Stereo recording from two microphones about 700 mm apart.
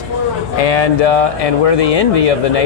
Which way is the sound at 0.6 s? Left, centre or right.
Left.